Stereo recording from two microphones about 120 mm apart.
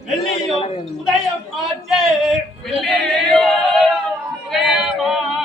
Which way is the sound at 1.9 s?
5° right (ahead or behind).